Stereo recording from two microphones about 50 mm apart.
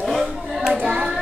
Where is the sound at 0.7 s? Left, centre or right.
Right.